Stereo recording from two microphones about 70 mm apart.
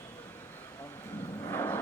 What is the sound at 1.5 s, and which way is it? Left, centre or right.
Vehicle, left.